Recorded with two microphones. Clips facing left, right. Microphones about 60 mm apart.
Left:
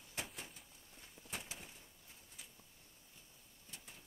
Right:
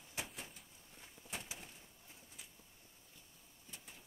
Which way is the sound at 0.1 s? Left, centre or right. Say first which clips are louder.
Even; centre.